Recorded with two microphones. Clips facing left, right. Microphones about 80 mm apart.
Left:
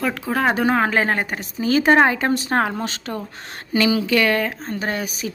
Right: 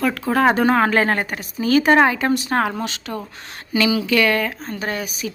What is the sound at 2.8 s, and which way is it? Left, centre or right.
A woman's voice, left.